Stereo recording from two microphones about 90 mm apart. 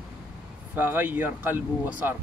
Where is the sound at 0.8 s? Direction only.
20° right (ahead or behind).